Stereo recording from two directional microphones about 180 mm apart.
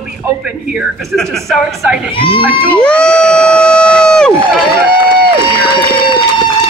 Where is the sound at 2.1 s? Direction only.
30° left (ahead or behind).